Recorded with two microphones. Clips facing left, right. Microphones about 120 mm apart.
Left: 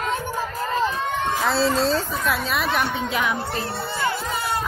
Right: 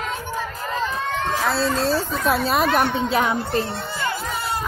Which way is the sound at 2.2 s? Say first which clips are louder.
Right 4 dB; 40° right (ahead or behind).